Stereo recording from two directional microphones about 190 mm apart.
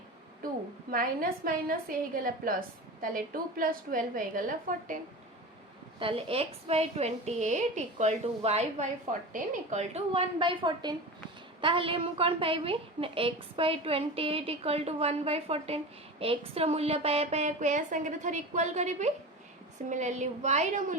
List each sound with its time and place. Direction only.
0.9 s a woman's voice: 50° right (ahead or behind)
6.0 s a woman's voice: 30° right (ahead or behind)